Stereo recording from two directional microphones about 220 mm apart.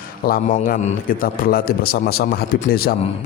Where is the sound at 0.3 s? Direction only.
35° left (ahead or behind).